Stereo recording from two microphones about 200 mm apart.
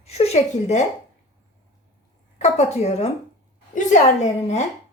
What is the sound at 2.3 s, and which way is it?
Speech, 35° left (ahead or behind).